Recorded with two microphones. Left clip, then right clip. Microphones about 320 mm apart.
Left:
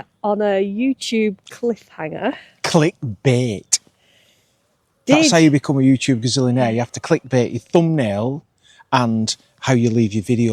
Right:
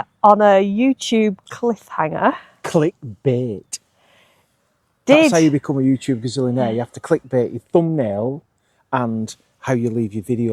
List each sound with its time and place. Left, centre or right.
0.0 s speech: right
2.6 s speech: centre
5.3 s speech: centre